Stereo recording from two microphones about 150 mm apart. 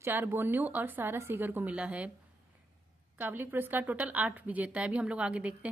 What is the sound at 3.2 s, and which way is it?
A woman's voice, 10° right (ahead or behind).